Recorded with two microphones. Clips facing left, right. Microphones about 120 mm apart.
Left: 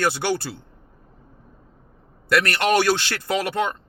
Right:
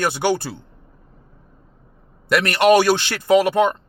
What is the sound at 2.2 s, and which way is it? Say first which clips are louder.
Speech: right 5 dB; 15° right (ahead or behind).